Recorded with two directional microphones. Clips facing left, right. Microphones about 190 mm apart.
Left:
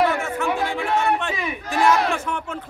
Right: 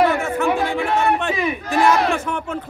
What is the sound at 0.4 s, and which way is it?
Chatter, 55° right (ahead or behind).